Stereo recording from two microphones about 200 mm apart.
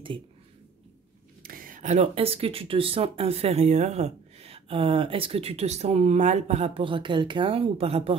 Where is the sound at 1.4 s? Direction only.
45° right (ahead or behind).